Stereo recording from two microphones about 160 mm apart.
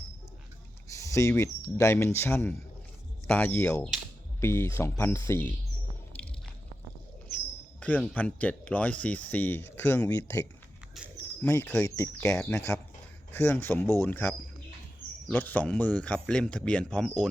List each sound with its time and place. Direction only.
0.9 s a sound: 20° left (ahead or behind)
1.3 s speech: 15° left (ahead or behind)
4.4 s speech: 15° left (ahead or behind)
6.1 s squish: 10° left (ahead or behind)
7.8 s speech: 10° left (ahead or behind)
11.4 s speech: 10° left (ahead or behind)